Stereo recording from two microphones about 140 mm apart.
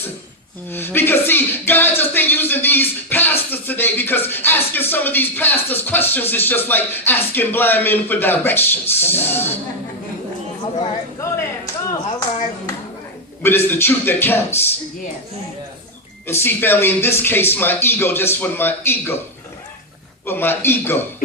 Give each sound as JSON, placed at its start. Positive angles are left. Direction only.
{"t": 0.7, "sound": "speech", "side_deg": 15}
{"t": 10.8, "sound": "speech", "side_deg": 25}
{"t": 13.4, "sound": "speech", "side_deg": 15}
{"t": 16.2, "sound": "speech", "side_deg": 15}
{"t": 20.2, "sound": "speech", "side_deg": 15}